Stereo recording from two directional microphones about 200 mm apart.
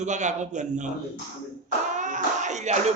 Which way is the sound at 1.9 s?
40° right (ahead or behind).